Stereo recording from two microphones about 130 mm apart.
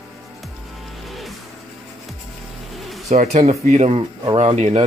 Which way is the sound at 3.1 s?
65° right (ahead or behind).